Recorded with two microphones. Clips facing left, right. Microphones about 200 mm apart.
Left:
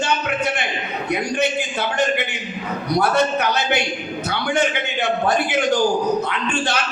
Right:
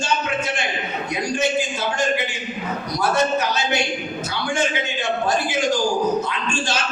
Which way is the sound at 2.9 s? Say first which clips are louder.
Left 2 dB; 60° left (ahead or behind).